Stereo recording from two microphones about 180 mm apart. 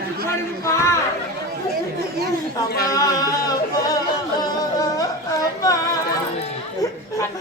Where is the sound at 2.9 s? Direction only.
20° left (ahead or behind).